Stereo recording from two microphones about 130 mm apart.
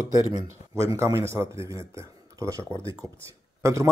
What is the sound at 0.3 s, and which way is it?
Speech, 30° right (ahead or behind).